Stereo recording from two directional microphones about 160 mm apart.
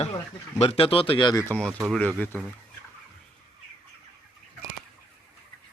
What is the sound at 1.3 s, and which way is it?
Speech, 15° left (ahead or behind).